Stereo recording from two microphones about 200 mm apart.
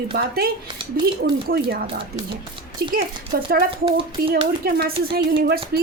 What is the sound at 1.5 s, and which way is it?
Speech, 50° right (ahead or behind).